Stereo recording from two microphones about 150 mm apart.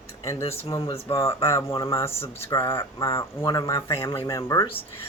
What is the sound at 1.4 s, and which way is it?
Speech, 20° left (ahead or behind).